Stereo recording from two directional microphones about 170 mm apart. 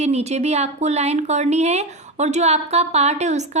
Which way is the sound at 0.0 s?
40° right (ahead or behind).